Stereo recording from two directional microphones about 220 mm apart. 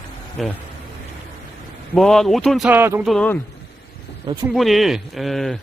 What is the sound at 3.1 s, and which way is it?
Speech, 5° left (ahead or behind).